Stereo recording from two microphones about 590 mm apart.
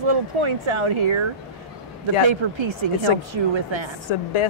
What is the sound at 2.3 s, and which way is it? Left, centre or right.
A woman's voice, right.